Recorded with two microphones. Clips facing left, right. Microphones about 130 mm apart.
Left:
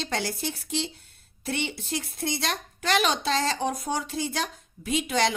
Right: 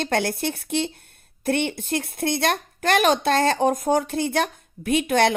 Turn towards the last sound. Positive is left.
turn(degrees=-55)  # may be behind; listen again after turning